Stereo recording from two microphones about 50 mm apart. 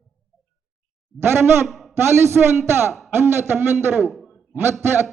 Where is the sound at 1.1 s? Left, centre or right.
Right.